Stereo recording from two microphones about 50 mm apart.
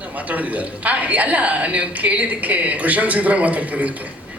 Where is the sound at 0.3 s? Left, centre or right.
Right.